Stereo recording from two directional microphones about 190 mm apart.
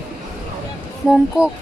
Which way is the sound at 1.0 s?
5° right (ahead or behind).